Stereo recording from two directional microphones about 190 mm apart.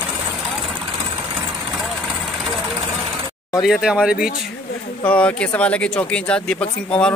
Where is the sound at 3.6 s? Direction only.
5° right (ahead or behind).